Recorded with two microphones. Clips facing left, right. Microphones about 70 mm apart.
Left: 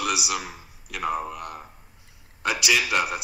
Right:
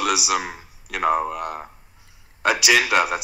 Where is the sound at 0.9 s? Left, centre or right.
Right.